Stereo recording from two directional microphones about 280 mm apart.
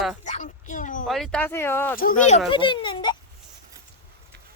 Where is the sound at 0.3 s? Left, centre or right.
Left.